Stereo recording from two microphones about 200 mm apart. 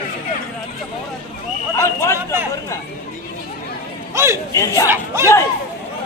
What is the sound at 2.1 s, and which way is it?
Chatter, 10° right (ahead or behind).